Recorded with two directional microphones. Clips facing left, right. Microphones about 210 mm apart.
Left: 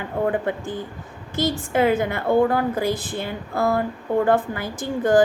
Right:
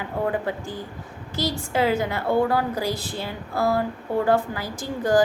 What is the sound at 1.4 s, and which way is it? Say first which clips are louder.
A woman's voice: left 3 dB; 50° left (ahead or behind).